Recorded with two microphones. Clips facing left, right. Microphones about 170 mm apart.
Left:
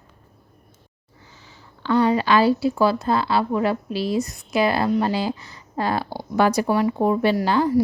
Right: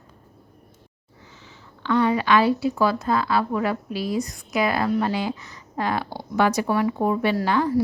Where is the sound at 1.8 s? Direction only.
35° left (ahead or behind).